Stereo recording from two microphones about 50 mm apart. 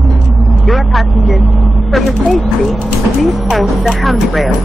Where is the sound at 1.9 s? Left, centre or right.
Centre.